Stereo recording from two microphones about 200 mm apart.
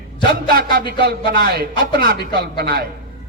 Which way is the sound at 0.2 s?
50° right (ahead or behind).